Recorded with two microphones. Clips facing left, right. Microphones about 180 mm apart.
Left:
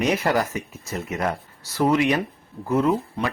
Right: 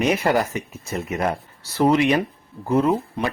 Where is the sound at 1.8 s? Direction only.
25° right (ahead or behind).